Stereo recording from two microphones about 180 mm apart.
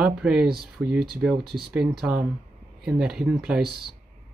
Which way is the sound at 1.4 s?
60° right (ahead or behind).